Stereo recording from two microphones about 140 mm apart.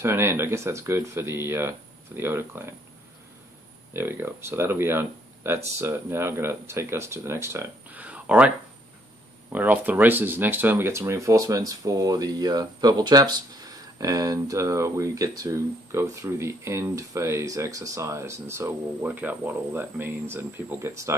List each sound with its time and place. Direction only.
0.0 s speech: 15° right (ahead or behind)
3.9 s speech: 15° right (ahead or behind)